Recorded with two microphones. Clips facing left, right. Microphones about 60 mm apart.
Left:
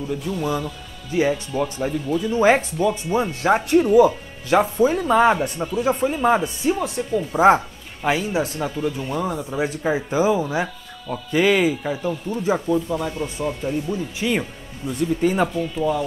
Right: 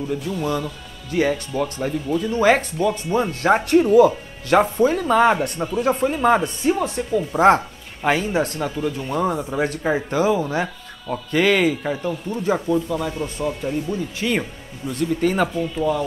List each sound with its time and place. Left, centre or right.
0.4 s speech: centre
2.3 s speech: centre
3.5 s speech: centre
3.9 s speech: centre
7.2 s speech: centre
9.6 s speech: centre